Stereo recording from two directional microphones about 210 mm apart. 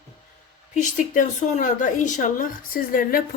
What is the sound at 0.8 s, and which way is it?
A woman's voice, 35° left (ahead or behind).